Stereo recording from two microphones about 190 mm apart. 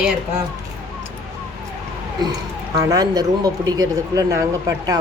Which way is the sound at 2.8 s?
20° right (ahead or behind).